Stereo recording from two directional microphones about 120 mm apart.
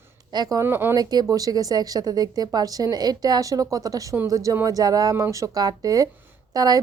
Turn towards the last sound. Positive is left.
turn(degrees=-30)  # may be behind; listen again after turning